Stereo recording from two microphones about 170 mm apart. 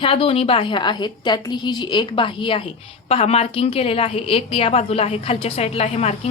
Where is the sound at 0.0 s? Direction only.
35° left (ahead or behind).